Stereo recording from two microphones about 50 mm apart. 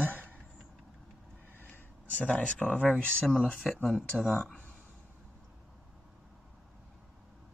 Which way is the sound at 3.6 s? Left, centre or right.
Centre.